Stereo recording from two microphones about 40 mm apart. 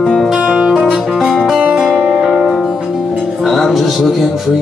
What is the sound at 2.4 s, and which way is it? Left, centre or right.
Music, centre.